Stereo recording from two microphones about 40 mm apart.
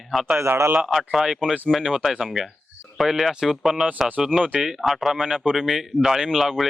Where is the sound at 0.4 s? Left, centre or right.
Right.